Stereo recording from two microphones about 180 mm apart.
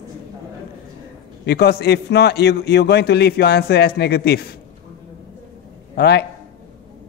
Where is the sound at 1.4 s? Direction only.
65° left (ahead or behind).